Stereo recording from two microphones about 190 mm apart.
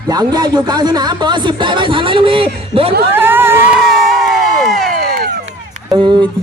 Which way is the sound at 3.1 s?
10° right (ahead or behind).